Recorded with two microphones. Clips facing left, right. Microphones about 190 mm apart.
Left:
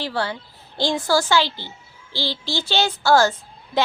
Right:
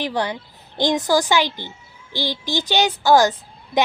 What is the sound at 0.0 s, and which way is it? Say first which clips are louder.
A woman's voice: right 2 dB; 15° right (ahead or behind).